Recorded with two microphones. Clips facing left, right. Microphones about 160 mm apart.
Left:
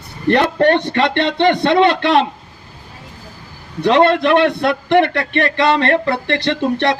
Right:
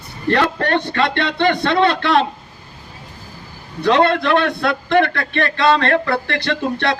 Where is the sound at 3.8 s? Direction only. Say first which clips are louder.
Left 3 dB; 20° left (ahead or behind).